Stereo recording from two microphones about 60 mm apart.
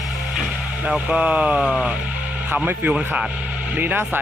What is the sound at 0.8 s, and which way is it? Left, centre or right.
Speech, right.